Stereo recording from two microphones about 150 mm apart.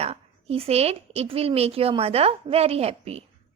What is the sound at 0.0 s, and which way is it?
A woman's voice, 45° right (ahead or behind).